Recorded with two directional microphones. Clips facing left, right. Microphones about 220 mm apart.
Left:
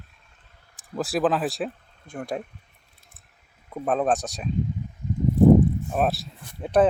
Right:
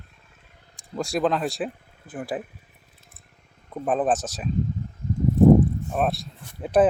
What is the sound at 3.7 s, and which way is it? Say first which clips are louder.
Speech: even; centre (ahead or behind).